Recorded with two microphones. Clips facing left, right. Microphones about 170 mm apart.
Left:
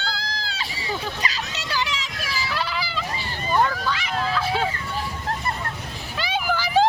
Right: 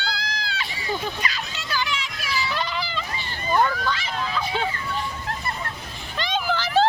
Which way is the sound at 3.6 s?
5° left (ahead or behind).